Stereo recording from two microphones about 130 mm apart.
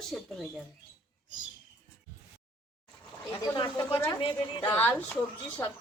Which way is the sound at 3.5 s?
40° left (ahead or behind).